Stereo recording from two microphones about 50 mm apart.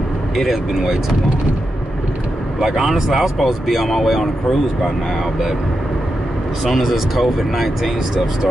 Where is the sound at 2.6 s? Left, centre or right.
Centre.